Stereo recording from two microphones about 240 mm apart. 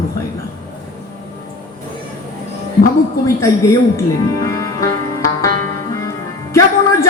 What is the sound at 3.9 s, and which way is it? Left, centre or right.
Music, centre.